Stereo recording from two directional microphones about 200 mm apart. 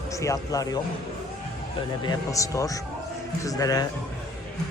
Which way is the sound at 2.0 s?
15° left (ahead or behind).